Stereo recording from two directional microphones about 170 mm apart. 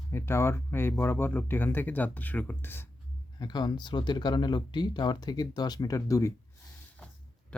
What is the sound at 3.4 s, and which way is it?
Speech, 25° left (ahead or behind).